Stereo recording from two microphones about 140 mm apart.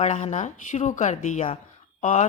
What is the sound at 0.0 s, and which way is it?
Speech, 55° left (ahead or behind).